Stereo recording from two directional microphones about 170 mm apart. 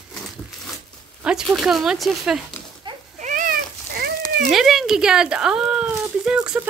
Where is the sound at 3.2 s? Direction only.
50° right (ahead or behind).